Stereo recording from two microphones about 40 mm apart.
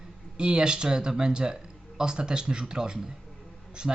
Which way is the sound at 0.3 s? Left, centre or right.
Right.